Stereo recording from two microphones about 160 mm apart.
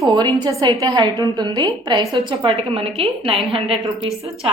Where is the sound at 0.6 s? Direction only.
25° right (ahead or behind).